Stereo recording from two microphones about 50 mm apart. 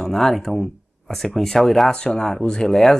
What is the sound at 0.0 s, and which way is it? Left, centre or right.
Speech, centre.